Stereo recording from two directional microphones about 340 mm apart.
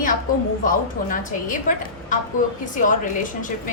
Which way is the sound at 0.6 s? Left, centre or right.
Left.